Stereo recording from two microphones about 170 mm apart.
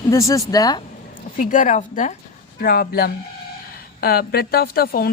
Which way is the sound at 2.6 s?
60° left (ahead or behind).